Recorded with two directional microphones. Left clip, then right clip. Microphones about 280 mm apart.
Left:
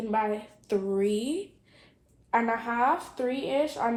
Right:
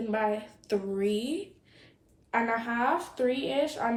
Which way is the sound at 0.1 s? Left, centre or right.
Centre.